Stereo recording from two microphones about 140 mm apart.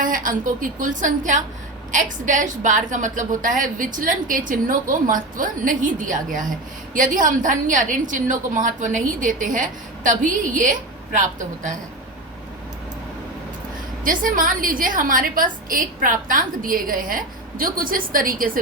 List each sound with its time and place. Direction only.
0.0 s a woman's voice: 75° right (ahead or behind)
14.0 s a woman's voice: 70° right (ahead or behind)